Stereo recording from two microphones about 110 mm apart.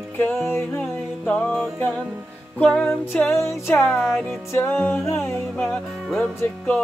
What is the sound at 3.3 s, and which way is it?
Music, 25° left (ahead or behind).